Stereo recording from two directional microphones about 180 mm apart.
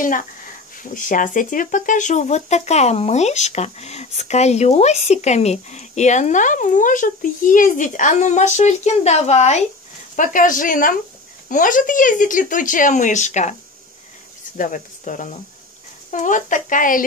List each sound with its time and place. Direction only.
0.9 s speech: 45° left (ahead or behind)
14.6 s speech: 45° left (ahead or behind)